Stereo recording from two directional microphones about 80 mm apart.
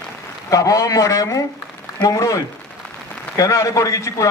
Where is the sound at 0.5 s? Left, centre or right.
Left.